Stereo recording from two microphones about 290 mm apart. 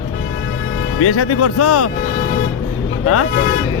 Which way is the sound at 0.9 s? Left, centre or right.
Left.